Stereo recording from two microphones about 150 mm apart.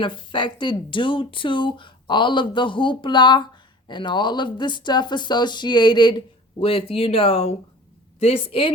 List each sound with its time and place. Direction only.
0.0 s speech: 35° left (ahead or behind)